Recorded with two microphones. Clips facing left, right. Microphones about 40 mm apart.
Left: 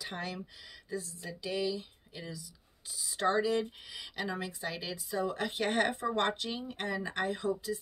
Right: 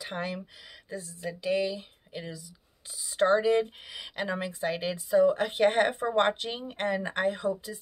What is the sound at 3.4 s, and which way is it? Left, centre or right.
Speech, right.